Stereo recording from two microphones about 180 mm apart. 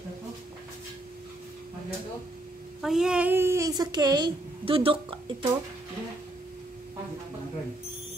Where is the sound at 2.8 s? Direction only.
5° right (ahead or behind); by 5.1 s 30° right (ahead or behind).